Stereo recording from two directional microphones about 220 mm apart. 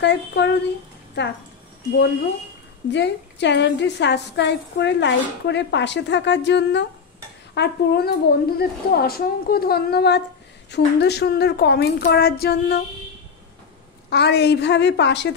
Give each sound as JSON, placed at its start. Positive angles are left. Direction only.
{"t": 0.0, "sound": "a woman's voice", "side_deg": 50}
{"t": 2.9, "sound": "a woman's voice", "side_deg": 50}
{"t": 14.1, "sound": "a woman's voice", "side_deg": 50}